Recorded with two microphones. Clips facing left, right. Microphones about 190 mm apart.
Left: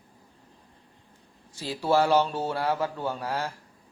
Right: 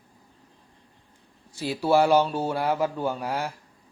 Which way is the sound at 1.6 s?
10° right (ahead or behind).